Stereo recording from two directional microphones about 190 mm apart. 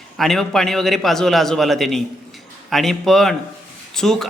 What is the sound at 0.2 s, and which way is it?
Speech, centre (ahead or behind).